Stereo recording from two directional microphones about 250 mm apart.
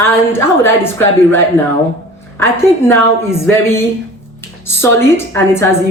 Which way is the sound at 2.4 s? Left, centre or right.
Centre.